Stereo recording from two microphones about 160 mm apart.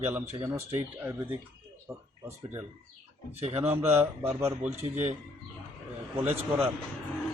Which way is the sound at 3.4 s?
40° right (ahead or behind).